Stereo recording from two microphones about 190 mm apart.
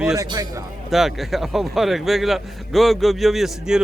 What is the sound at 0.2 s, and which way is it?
Speech, 20° right (ahead or behind).